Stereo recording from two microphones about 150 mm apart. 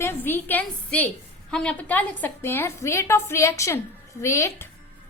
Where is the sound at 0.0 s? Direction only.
15° left (ahead or behind).